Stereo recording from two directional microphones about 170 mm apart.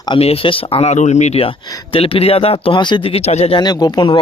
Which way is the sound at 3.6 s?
25° left (ahead or behind).